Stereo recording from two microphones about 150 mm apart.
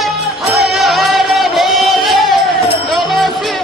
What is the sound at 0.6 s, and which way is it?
Music, centre (ahead or behind).